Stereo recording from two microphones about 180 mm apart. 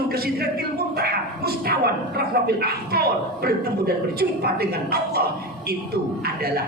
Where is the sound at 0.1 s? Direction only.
60° right (ahead or behind).